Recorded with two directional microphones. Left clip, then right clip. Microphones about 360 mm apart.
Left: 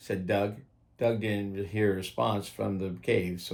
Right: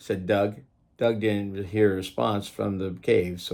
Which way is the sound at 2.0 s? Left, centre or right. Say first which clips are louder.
Right 3 dB; centre.